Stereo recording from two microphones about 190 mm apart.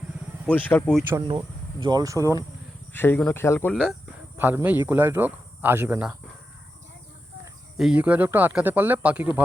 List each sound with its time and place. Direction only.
0.4 s speech: 10° left (ahead or behind)
1.4 s speech: 20° right (ahead or behind)
2.9 s speech: 10° left (ahead or behind)
4.4 s speech: 10° right (ahead or behind)
7.8 s speech: 5° right (ahead or behind)